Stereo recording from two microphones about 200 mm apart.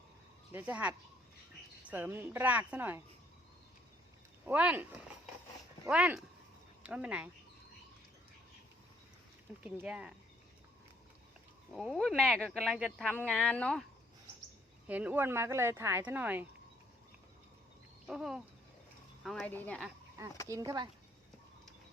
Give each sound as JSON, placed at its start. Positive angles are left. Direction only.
{"t": 0.5, "sound": "speech", "side_deg": -5}
{"t": 4.4, "sound": "speech", "side_deg": -5}
{"t": 9.6, "sound": "speech", "side_deg": -5}
{"t": 11.7, "sound": "speech", "side_deg": 0}
{"t": 14.8, "sound": "speech", "side_deg": -5}
{"t": 18.1, "sound": "speech", "side_deg": 0}
{"t": 20.5, "sound": "speech", "side_deg": -15}